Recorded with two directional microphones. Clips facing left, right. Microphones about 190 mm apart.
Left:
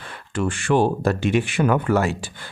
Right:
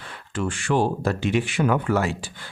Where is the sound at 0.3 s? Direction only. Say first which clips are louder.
Left 3 dB; 55° left (ahead or behind).